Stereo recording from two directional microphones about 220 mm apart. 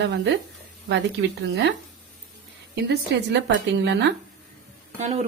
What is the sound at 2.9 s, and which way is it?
Speech, 50° right (ahead or behind).